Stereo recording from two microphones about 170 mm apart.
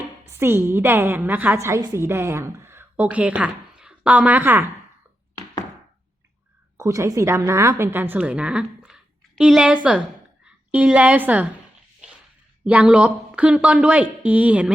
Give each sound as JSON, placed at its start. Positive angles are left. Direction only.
{"t": 0.3, "sound": "a woman's voice", "side_deg": -15}
{"t": 6.7, "sound": "a woman's voice", "side_deg": -15}
{"t": 12.6, "sound": "a woman's voice", "side_deg": -5}